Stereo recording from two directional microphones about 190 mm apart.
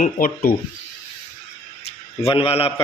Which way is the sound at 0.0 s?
50° left (ahead or behind).